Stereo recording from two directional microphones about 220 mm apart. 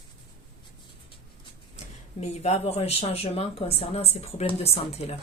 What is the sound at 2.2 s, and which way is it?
Speech, 30° left (ahead or behind).